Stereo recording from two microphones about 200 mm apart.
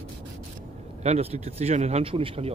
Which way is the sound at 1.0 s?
30° right (ahead or behind).